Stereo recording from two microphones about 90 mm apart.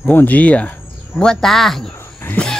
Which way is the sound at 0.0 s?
20° left (ahead or behind).